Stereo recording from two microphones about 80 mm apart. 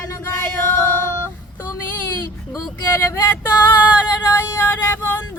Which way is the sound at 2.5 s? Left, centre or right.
Left.